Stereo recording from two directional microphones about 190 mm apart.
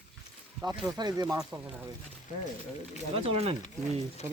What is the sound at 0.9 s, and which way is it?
Speech, 20° right (ahead or behind).